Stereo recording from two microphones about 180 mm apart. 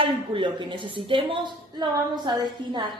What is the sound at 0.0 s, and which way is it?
A woman's voice, 30° right (ahead or behind).